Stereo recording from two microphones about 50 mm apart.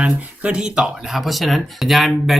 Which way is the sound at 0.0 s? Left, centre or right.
Right.